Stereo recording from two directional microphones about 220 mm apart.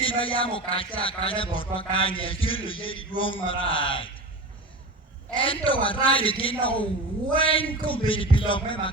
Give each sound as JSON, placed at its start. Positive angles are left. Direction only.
{"t": 0.0, "sound": "speech", "side_deg": 25}
{"t": 5.3, "sound": "speech", "side_deg": 25}